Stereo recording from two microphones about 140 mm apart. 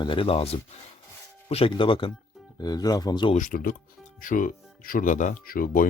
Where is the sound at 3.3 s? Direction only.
70° left (ahead or behind).